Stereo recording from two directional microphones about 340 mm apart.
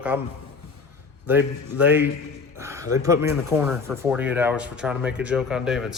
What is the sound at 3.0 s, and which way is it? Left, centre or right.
Speech, centre.